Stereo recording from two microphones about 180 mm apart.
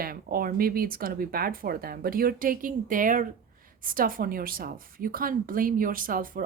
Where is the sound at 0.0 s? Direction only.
55° right (ahead or behind).